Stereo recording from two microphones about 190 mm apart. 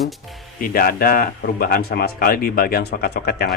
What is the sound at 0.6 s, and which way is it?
Speech, 50° left (ahead or behind).